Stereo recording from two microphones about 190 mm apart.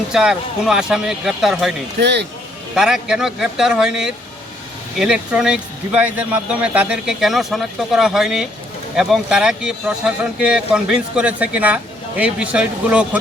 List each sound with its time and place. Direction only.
0.1 s speech: 5° right (ahead or behind)
2.0 s speech: 65° right (ahead or behind)
2.7 s speech: 5° right (ahead or behind)